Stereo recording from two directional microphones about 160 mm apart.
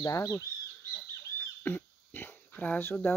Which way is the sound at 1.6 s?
10° left (ahead or behind).